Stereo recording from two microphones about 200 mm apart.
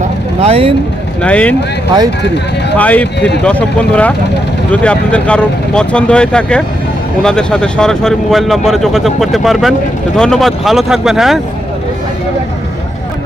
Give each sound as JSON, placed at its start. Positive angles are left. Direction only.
{"t": 0.4, "sound": "speech", "side_deg": -30}
{"t": 1.2, "sound": "speech", "side_deg": 5}
{"t": 2.8, "sound": "speech", "side_deg": 10}